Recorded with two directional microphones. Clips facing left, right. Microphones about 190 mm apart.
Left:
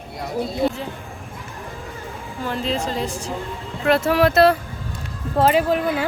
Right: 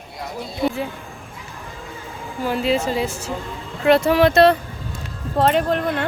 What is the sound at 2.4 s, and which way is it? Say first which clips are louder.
A woman's voice: right 4 dB; 10° right (ahead or behind).